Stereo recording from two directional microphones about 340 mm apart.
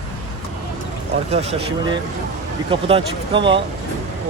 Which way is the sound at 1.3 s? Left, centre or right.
Centre.